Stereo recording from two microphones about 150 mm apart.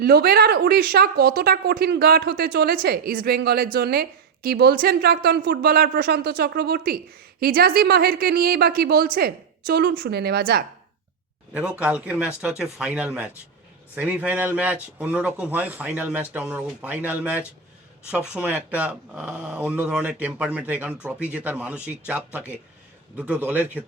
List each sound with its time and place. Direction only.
0.0 s a woman's voice: 90° right
11.5 s speech: 10° right (ahead or behind)